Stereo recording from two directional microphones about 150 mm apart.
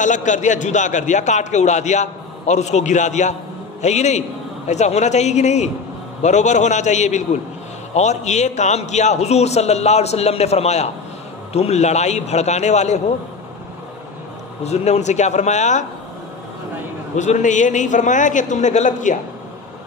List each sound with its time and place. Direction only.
0.0 s a man's voice: 55° left (ahead or behind)
14.6 s a man's voice: 45° left (ahead or behind)
17.2 s a man's voice: 55° left (ahead or behind)